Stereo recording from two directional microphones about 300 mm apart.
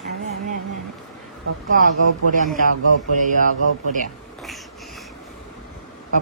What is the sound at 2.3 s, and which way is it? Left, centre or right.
A woman's voice, right.